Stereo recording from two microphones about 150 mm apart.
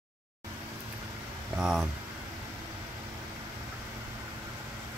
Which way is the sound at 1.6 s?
5° right (ahead or behind).